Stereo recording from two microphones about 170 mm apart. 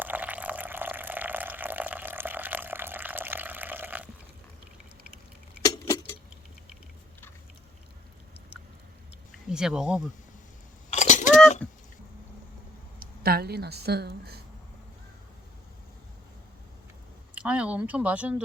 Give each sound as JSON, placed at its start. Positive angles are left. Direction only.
{"t": 0.0, "sound": "water", "side_deg": -10}
{"t": 5.7, "sound": "keys jangling", "side_deg": 20}
{"t": 9.3, "sound": "speech", "side_deg": -5}
{"t": 10.9, "sound": "a sound", "side_deg": 45}
{"t": 13.0, "sound": "speech", "side_deg": -65}
{"t": 17.3, "sound": "speech", "side_deg": -5}